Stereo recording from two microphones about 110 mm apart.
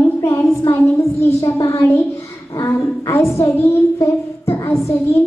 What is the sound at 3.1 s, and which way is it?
Speech, 25° left (ahead or behind).